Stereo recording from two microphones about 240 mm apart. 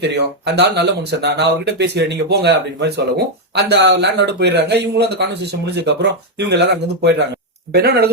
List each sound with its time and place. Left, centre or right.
0.0 s speech: right